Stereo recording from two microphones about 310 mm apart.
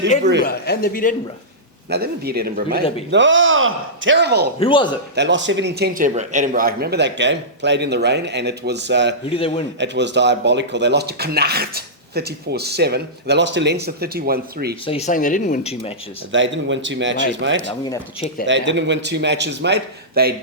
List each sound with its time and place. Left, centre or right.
0.4 s speech: left
1.9 s speech: right
4.6 s speech: centre
5.1 s speech: right
9.3 s speech: centre
9.8 s speech: right
14.8 s speech: left
16.3 s speech: right
17.7 s speech: centre
18.4 s speech: right